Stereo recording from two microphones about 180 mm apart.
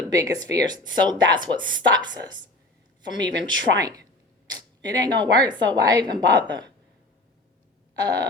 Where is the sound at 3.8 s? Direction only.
20° right (ahead or behind).